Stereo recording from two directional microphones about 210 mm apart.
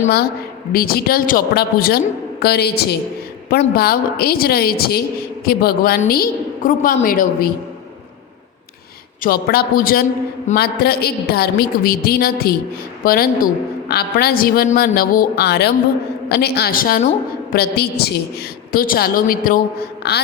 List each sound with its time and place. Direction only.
0.7 s a woman's voice: 45° left (ahead or behind)
9.2 s a woman's voice: 45° left (ahead or behind)
20.0 s a sound: 50° left (ahead or behind)